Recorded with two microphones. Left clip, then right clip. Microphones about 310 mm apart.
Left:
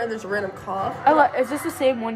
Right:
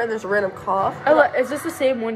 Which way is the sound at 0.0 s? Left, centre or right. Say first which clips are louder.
Right 5 dB; centre.